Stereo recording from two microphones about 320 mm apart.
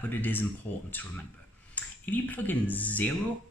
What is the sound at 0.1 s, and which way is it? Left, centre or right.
Speech, centre.